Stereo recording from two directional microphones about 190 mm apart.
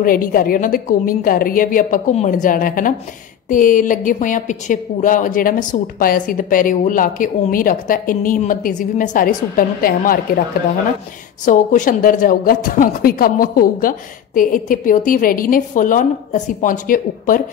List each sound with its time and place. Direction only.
0.0 s a woman's voice: 50° left (ahead or behind)
11.4 s a woman's voice: 40° left (ahead or behind)